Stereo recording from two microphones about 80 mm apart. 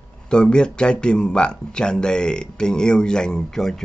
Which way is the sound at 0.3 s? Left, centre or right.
Centre.